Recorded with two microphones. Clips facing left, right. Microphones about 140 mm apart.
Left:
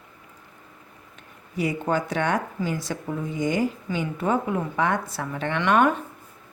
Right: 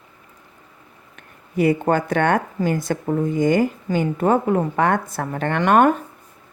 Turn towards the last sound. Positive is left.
turn(degrees=-50)  # may be behind; listen again after turning